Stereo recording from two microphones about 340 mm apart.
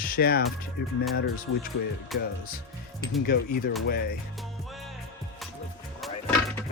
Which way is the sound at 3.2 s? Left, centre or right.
Left.